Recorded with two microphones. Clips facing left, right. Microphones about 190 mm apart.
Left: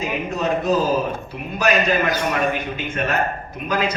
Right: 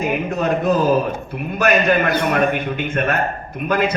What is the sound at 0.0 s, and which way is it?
A man's voice, 55° right (ahead or behind).